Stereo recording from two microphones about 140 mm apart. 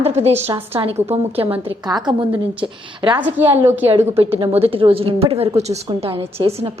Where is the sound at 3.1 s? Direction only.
10° right (ahead or behind).